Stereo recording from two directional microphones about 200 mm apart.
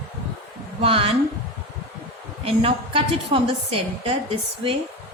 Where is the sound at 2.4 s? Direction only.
25° right (ahead or behind).